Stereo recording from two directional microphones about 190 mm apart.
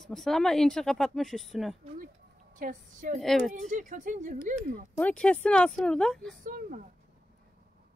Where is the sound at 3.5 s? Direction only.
40° right (ahead or behind).